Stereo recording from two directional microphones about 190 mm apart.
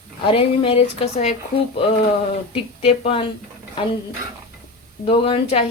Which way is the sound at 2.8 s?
30° left (ahead or behind).